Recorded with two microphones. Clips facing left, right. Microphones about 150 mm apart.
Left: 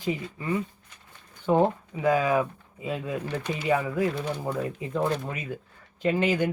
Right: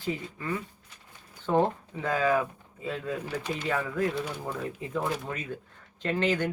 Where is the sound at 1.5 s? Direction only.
15° left (ahead or behind).